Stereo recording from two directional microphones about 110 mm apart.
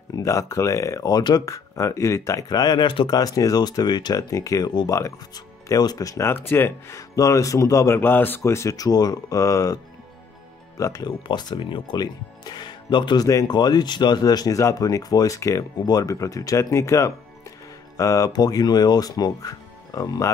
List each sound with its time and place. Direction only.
0.1 s speech: 30° left (ahead or behind); by 3.2 s 45° left (ahead or behind)
3.2 s speech: 35° left (ahead or behind)
10.8 s speech: 30° left (ahead or behind)
11.1 s speech: 45° left (ahead or behind)